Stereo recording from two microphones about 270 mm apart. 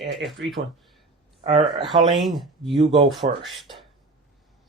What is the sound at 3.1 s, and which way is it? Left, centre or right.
Speech, centre.